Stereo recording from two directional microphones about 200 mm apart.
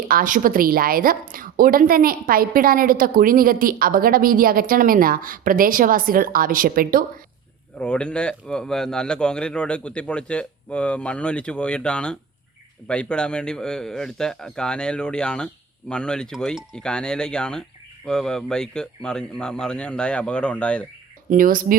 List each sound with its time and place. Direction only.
0.1 s a woman's voice: 40° right (ahead or behind)
7.8 s speech: 5° left (ahead or behind)
21.2 s a woman's voice: 45° right (ahead or behind)